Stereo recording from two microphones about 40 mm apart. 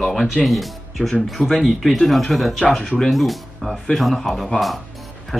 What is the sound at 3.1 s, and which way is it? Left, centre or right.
Speech, centre.